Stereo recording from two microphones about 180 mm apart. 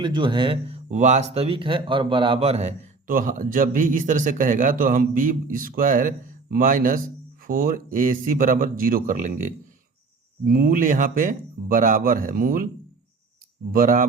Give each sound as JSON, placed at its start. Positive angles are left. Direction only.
{"t": 0.0, "sound": "speech", "side_deg": -25}
{"t": 0.9, "sound": "a man's voice", "side_deg": -40}
{"t": 13.7, "sound": "a man's voice", "side_deg": -50}